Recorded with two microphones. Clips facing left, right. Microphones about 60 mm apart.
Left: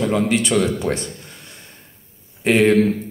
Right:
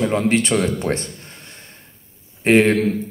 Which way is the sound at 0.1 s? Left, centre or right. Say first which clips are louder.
Even; right.